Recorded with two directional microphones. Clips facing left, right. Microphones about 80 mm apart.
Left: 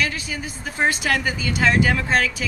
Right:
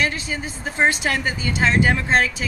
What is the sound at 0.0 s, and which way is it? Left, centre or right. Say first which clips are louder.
Speech: right 2 dB; right.